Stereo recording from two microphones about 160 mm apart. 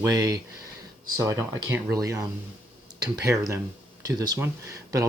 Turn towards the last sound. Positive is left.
turn(degrees=-20)  # may be behind; listen again after turning